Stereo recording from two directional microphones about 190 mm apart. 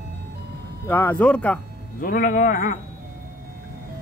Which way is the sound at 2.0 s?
45° left (ahead or behind).